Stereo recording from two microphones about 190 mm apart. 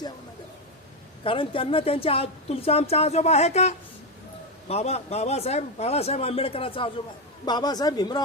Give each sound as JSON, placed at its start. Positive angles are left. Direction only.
{"t": 1.2, "sound": "a woman's voice", "side_deg": 30}